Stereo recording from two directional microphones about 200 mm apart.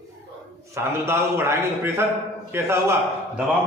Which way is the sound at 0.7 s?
10° right (ahead or behind).